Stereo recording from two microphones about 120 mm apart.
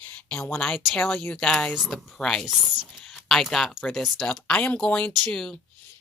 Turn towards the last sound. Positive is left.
turn(degrees=5)  # may be behind; listen again after turning